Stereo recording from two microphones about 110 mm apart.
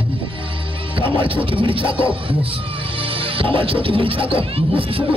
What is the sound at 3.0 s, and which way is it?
Speech, 55° right (ahead or behind).